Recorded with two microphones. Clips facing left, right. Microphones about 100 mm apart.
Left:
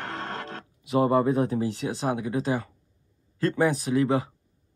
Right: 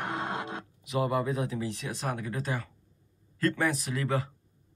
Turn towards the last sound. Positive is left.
turn(degrees=25)  # may be behind; listen again after turning